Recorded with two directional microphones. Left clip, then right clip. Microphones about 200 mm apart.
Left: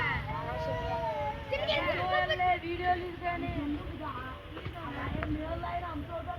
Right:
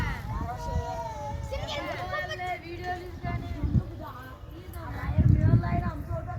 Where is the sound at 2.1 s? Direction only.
25° left (ahead or behind).